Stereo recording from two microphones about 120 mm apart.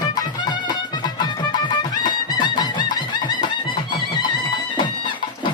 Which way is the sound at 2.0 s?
40° left (ahead or behind).